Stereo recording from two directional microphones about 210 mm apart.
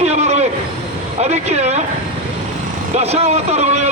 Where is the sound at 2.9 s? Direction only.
30° right (ahead or behind).